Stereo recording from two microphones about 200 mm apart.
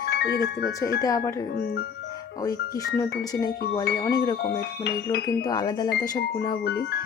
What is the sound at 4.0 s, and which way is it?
Music, 15° left (ahead or behind).